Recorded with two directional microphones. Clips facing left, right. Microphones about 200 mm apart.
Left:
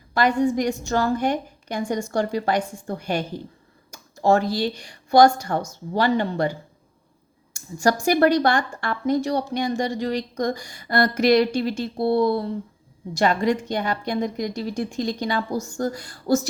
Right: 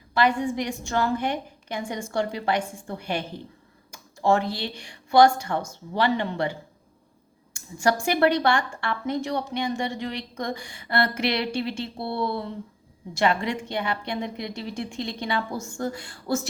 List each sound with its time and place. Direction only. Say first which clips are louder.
0.2 s a woman's voice: left 3 dB; 40° left (ahead or behind)